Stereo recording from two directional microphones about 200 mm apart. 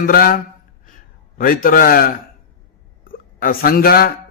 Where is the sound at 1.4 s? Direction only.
45° left (ahead or behind).